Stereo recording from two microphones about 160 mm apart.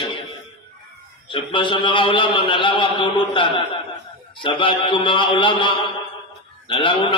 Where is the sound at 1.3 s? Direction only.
30° left (ahead or behind).